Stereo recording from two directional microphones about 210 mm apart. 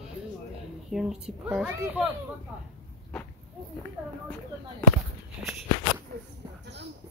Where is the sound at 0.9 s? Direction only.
Centre (ahead or behind).